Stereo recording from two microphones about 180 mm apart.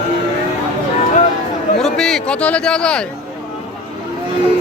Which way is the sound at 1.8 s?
Centre (ahead or behind).